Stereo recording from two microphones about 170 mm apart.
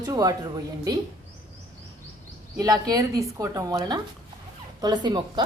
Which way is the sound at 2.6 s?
20° right (ahead or behind).